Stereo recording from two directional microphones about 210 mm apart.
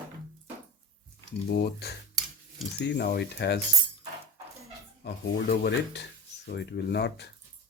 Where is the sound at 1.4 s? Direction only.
50° left (ahead or behind).